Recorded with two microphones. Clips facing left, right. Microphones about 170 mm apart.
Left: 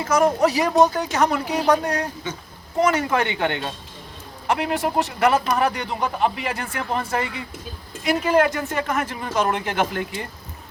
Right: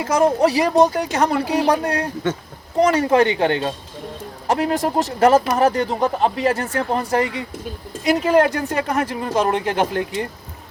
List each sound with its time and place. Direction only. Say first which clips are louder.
0.2 s speech: right 3 dB; 30° right (ahead or behind)
4.4 s speech: right 3 dB; 40° right (ahead or behind)